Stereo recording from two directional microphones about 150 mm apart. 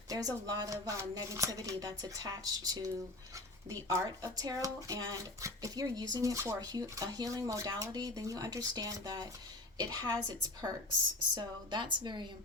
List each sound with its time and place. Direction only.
0.1 s speech: 25° right (ahead or behind)